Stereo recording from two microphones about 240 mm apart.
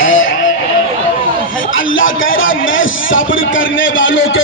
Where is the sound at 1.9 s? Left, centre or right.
Left.